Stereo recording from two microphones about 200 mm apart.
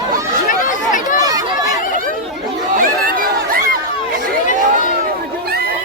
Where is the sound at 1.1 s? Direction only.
15° right (ahead or behind).